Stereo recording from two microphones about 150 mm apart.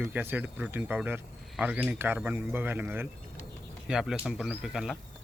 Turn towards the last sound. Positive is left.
turn(degrees=0)  # may be behind; listen again after turning